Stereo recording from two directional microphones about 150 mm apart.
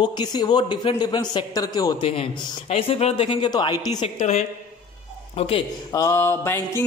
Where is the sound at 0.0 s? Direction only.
30° left (ahead or behind).